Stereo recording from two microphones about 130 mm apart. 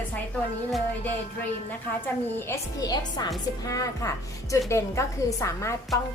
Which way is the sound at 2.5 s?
30° left (ahead or behind).